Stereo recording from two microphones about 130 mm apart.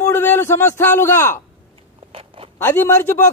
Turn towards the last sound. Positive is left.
turn(degrees=20)  # may be behind; listen again after turning